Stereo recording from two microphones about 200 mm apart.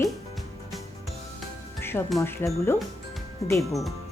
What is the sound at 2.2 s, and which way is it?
Speech, 15° left (ahead or behind).